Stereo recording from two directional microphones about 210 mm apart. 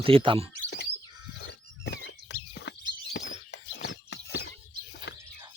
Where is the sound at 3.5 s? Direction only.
55° left (ahead or behind).